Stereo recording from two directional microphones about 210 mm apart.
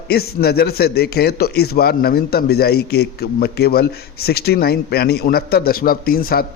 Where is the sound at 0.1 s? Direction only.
50° left (ahead or behind).